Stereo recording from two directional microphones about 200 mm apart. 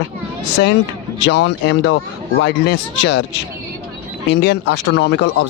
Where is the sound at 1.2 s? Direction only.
65° left (ahead or behind).